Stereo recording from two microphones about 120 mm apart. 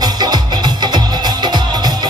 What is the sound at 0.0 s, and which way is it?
Music, 35° right (ahead or behind).